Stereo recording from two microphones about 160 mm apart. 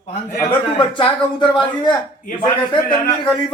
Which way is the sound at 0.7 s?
30° left (ahead or behind).